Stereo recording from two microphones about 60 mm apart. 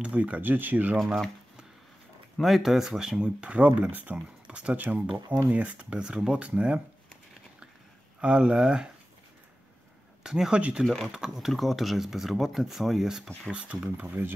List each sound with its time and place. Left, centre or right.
0.0 s speech: right
0.4 s speech: right
0.9 s speech: centre
2.4 s speech: centre
8.2 s speech: centre
10.2 s speech: centre
10.8 s speech: centre
11.1 s speech: centre
13.5 s speech: centre
14.0 s speech: right